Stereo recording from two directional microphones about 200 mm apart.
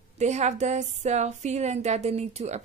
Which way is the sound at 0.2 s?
35° right (ahead or behind).